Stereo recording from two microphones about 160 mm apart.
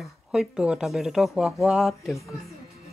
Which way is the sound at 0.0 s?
5° right (ahead or behind).